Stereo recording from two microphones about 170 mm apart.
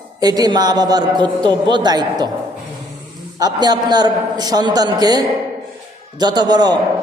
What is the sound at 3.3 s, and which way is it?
A man's voice, 25° right (ahead or behind).